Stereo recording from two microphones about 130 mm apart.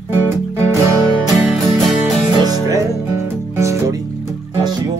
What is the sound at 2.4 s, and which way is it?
Music, 25° right (ahead or behind).